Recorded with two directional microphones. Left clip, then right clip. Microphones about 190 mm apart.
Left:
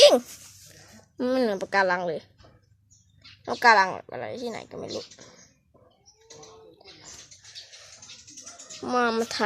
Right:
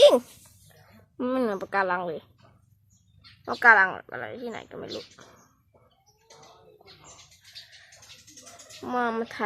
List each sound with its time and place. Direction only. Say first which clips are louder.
1.1 s speech: left 2 dB; 10° left (ahead or behind)
3.4 s speech: right 1 dB; 20° left (ahead or behind)
8.8 s speech: left 3 dB; 15° left (ahead or behind)